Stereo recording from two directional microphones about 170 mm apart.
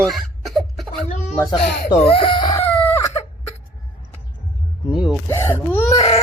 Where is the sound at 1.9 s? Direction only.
35° left (ahead or behind).